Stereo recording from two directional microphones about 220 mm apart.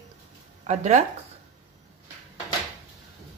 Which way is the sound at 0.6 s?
35° right (ahead or behind).